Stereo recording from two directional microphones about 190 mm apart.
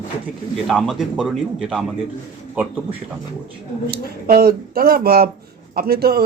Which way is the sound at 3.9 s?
50° right (ahead or behind).